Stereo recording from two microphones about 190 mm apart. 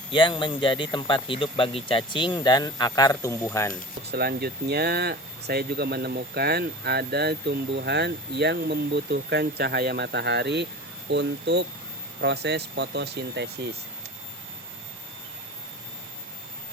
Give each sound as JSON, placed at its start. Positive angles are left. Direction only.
{"t": 0.1, "sound": "speech", "side_deg": 25}
{"t": 4.1, "sound": "speech", "side_deg": -55}